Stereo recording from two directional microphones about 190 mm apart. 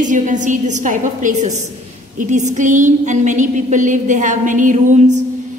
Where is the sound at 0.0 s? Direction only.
40° right (ahead or behind).